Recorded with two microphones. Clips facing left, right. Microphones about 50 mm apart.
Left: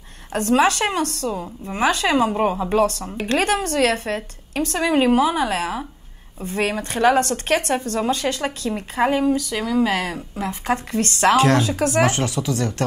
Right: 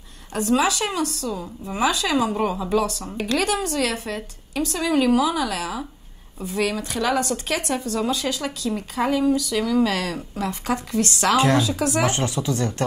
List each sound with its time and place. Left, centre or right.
0.3 s a woman's voice: left
2.8 s a woman's voice: left
9.7 s speech: centre
10.7 s a woman's voice: left
12.5 s speech: centre